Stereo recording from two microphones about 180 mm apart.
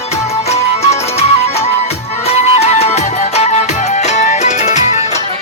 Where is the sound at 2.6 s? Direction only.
35° left (ahead or behind).